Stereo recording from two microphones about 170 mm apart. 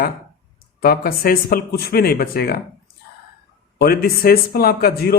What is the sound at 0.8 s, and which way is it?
Speech, 60° left (ahead or behind).